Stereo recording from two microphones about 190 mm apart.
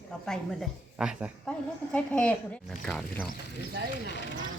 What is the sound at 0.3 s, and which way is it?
A woman's voice, centre (ahead or behind).